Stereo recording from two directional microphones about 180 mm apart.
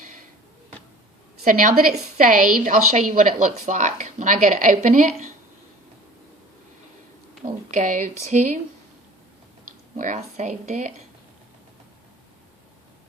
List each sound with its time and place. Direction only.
1.5 s a woman's voice: 50° right (ahead or behind)
7.4 s a woman's voice: 45° right (ahead or behind)
10.0 s a woman's voice: 40° right (ahead or behind)